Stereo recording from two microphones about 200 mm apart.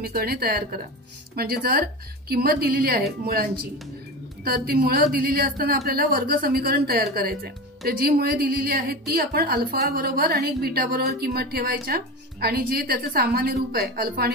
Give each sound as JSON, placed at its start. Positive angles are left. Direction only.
{"t": 0.0, "sound": "speech", "side_deg": -50}
{"t": 4.5, "sound": "speech", "side_deg": -50}